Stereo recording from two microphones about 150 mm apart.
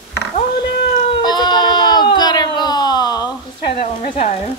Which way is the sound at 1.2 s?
30° left (ahead or behind).